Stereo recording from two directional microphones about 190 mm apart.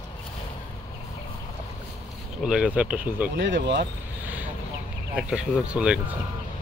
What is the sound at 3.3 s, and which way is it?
Speech, 70° right (ahead or behind).